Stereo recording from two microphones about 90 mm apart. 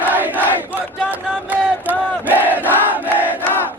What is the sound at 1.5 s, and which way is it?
Battle cry, 20° right (ahead or behind).